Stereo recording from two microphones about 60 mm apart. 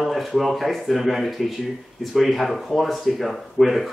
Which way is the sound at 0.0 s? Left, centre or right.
Centre.